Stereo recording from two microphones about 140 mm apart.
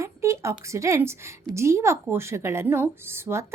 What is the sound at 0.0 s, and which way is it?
A woman's voice, 20° right (ahead or behind).